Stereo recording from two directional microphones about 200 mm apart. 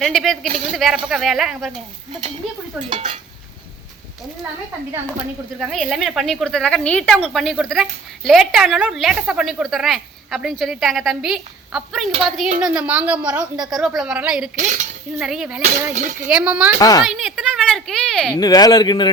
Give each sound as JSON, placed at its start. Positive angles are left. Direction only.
{"t": 0.0, "sound": "a woman's voice", "side_deg": 0}
{"t": 0.4, "sound": "cutlery", "side_deg": -35}
{"t": 0.7, "sound": "a woman's voice", "side_deg": 0}
{"t": 2.9, "sound": "cutlery", "side_deg": -30}
{"t": 5.5, "sound": "a woman's voice", "side_deg": 0}
{"t": 14.5, "sound": "cutlery", "side_deg": -35}
{"t": 15.1, "sound": "a woman's voice", "side_deg": -5}
{"t": 15.9, "sound": "speech", "side_deg": -40}
{"t": 16.2, "sound": "a woman's voice", "side_deg": -5}
{"t": 16.8, "sound": "a man's voice", "side_deg": 20}
{"t": 17.1, "sound": "a woman's voice", "side_deg": 0}
{"t": 18.3, "sound": "a man's voice", "side_deg": 20}